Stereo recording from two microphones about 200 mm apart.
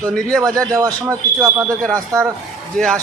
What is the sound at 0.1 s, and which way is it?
Speech, 5° left (ahead or behind).